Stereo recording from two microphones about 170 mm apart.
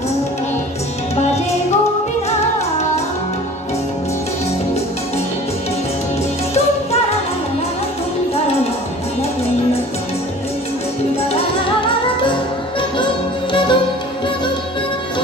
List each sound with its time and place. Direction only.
1.1 s music: 40° left (ahead or behind)
12.9 s music: 30° left (ahead or behind)